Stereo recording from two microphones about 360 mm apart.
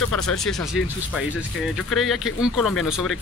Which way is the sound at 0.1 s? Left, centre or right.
Centre.